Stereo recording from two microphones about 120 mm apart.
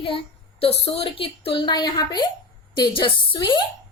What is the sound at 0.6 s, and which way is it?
A woman's voice, 60° left (ahead or behind).